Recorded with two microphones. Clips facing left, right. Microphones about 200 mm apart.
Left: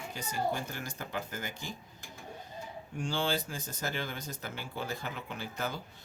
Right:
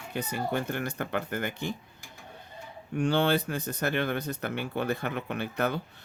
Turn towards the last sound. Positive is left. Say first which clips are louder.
# right 8 dB
turn(degrees=-60)  # may be behind; listen again after turning